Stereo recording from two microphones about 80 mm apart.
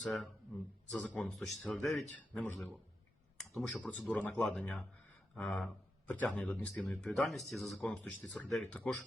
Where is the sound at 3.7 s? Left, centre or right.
Centre.